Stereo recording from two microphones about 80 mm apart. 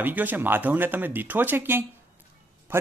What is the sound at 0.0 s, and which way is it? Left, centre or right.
Speech, right.